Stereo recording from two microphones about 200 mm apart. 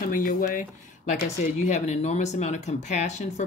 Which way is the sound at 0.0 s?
45° left (ahead or behind).